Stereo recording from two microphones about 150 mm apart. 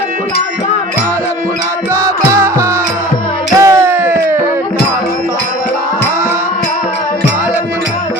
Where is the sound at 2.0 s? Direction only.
20° right (ahead or behind).